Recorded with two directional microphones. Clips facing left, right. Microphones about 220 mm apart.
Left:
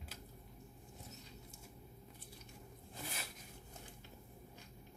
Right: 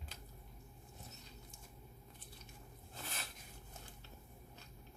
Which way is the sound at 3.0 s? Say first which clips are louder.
Left 2 dB; 10° left (ahead or behind).